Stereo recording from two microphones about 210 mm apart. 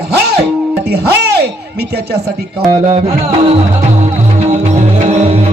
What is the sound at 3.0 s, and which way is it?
Music, 30° right (ahead or behind).